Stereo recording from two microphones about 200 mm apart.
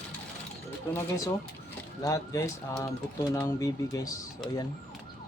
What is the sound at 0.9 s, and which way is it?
Speech, 15° left (ahead or behind).